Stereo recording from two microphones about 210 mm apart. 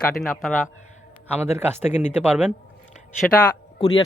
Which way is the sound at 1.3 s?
10° right (ahead or behind).